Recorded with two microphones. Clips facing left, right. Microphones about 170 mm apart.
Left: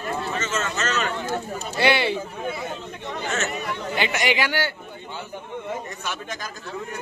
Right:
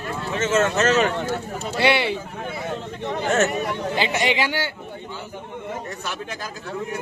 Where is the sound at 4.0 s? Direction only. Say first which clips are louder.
Right 1 dB; 30° right (ahead or behind).